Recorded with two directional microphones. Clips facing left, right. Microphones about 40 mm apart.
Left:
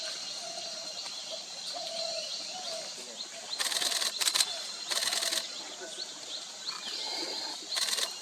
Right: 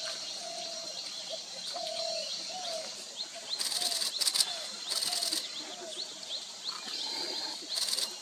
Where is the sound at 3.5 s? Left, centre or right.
Left.